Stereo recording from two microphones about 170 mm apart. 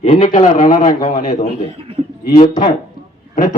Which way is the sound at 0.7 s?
55° left (ahead or behind).